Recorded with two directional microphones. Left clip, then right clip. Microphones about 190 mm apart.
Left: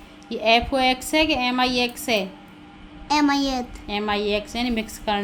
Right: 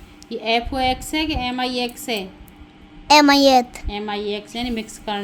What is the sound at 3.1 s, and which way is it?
Speech, 40° right (ahead or behind).